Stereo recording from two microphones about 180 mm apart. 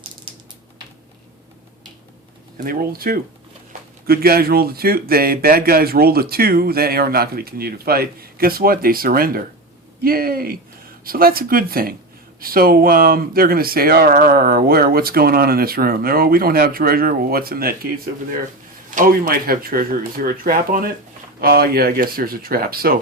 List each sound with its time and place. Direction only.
2.6 s speech: 55° right (ahead or behind)